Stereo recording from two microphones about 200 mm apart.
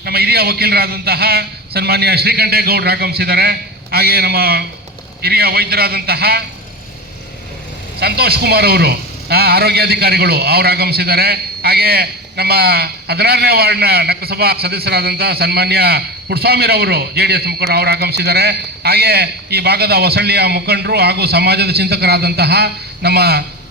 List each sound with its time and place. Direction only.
0.0 s a man's voice: 50° right (ahead or behind)
7.9 s a man's voice: 55° right (ahead or behind)